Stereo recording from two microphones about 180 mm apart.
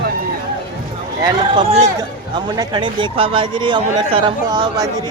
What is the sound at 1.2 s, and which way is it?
A man's voice, 20° right (ahead or behind).